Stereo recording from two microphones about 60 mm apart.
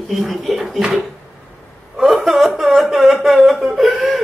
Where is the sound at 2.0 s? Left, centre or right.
Centre.